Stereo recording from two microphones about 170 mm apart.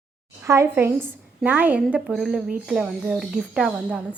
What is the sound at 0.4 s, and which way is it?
A woman's voice, 15° right (ahead or behind).